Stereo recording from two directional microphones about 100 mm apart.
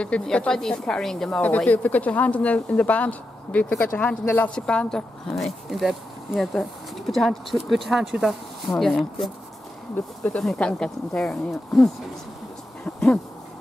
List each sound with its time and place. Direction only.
0.0 s speech: 10° left (ahead or behind)
1.4 s speech: 15° left (ahead or behind)
12.8 s a sound: 10° left (ahead or behind)